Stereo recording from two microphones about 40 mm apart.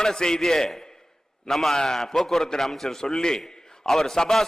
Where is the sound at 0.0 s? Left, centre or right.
Centre.